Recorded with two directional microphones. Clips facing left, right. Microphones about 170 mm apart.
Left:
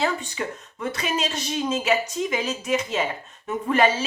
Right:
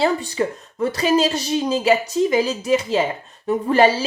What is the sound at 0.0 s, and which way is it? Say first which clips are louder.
Speech: right 6 dB; 35° right (ahead or behind).